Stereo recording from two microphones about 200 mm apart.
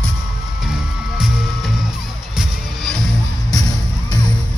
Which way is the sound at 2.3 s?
Centre (ahead or behind).